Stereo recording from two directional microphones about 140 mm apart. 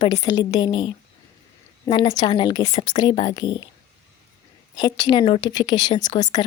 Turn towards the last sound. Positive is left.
turn(degrees=30)  # may be behind; listen again after turning